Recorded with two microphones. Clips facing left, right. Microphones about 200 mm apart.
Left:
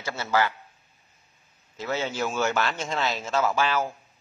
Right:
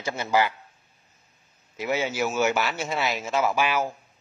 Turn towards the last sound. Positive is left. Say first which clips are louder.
# right 1 dB
turn(degrees=-10)  # may be behind; listen again after turning